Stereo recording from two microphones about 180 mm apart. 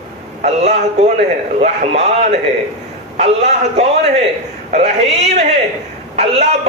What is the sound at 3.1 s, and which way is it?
A man's voice, 40° right (ahead or behind).